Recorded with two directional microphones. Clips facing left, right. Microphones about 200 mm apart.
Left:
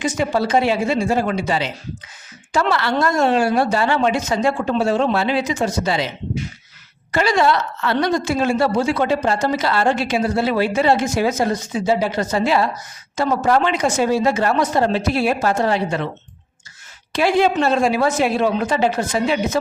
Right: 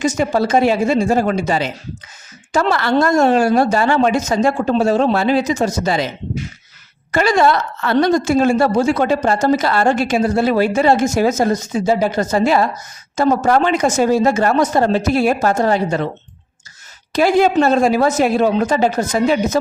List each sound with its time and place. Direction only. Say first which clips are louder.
0.0 s a woman's voice: right 3 dB; 45° right (ahead or behind)
7.1 s a woman's voice: right 3 dB; 50° right (ahead or behind)
17.1 s a woman's voice: right 3 dB; 40° right (ahead or behind)